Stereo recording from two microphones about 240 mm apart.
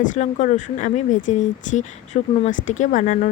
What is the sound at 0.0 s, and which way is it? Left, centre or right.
Speech, left.